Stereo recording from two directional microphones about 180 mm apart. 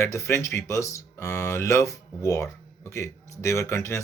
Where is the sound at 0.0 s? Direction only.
15° left (ahead or behind).